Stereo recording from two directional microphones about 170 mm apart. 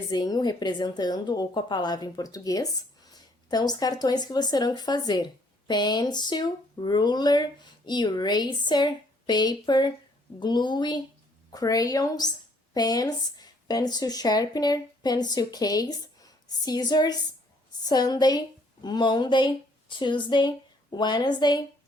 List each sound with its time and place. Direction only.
0.1 s a woman's voice: 25° left (ahead or behind)